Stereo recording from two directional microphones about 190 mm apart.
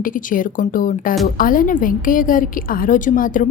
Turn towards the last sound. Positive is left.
turn(degrees=45)  # may be behind; listen again after turning